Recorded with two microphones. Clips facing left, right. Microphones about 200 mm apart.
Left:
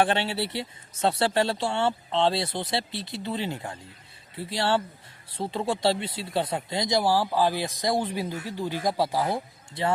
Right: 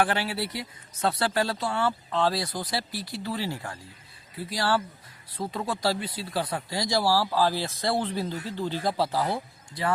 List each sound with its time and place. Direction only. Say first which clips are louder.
0.0 s speech: left 2 dB; 25° left (ahead or behind)